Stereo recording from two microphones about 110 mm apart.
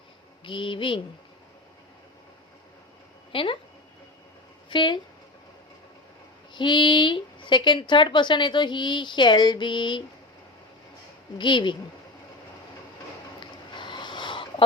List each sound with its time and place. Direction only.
0.4 s a woman's voice: 50° left (ahead or behind)
3.3 s a woman's voice: 55° left (ahead or behind)
4.7 s speech: 45° left (ahead or behind)
6.5 s a woman's voice: 45° left (ahead or behind)
11.3 s a woman's voice: 45° left (ahead or behind)
13.7 s a sound: 45° left (ahead or behind)